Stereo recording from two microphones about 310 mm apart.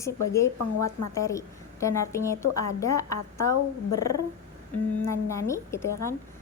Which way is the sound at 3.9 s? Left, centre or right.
Left.